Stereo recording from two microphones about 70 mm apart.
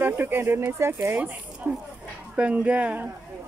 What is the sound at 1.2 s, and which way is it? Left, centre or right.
Speech, right.